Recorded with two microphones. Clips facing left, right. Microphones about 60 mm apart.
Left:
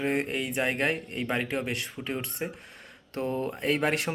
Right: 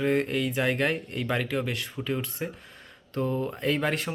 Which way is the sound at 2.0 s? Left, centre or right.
Centre.